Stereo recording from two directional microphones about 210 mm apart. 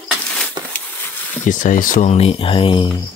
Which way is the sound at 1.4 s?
40° left (ahead or behind).